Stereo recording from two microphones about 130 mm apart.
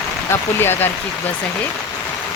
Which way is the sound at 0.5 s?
15° left (ahead or behind).